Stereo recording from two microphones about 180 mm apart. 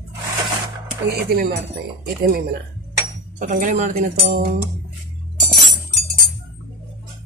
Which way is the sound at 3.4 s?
45° right (ahead or behind).